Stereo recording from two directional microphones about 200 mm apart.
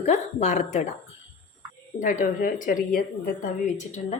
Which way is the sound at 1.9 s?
40° left (ahead or behind).